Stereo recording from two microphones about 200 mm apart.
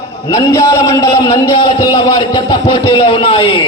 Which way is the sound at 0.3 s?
15° left (ahead or behind).